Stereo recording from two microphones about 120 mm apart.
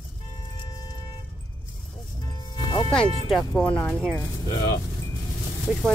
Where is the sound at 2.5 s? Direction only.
40° left (ahead or behind).